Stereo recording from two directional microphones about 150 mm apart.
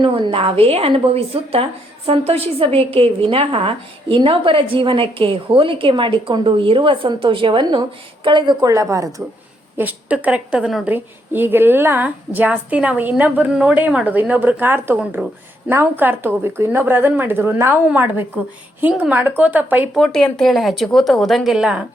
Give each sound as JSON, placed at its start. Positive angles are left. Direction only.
{"t": 0.0, "sound": "a woman's voice", "side_deg": -35}
{"t": 9.7, "sound": "a woman's voice", "side_deg": -10}
{"t": 19.9, "sound": "speech", "side_deg": 0}